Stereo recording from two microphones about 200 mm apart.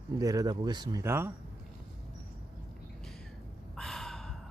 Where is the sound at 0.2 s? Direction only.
20° right (ahead or behind).